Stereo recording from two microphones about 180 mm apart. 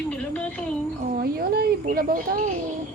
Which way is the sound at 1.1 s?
55° right (ahead or behind).